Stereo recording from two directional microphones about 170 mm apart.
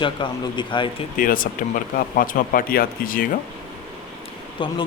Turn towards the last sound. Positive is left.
turn(degrees=30)  # may be behind; listen again after turning